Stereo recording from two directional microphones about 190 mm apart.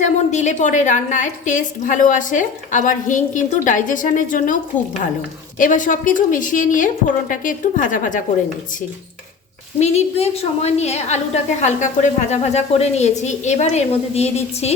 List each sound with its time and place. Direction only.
0.0 s a woman's voice: 40° left (ahead or behind)
5.5 s a woman's voice: 45° left (ahead or behind)
9.8 s a woman's voice: 35° left (ahead or behind)